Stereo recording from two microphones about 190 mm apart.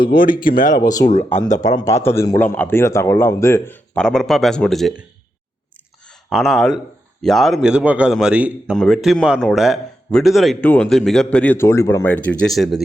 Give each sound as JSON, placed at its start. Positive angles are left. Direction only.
{"t": 0.0, "sound": "speech", "side_deg": 50}
{"t": 1.7, "sound": "a man's voice", "side_deg": 15}
{"t": 6.3, "sound": "a man's voice", "side_deg": 0}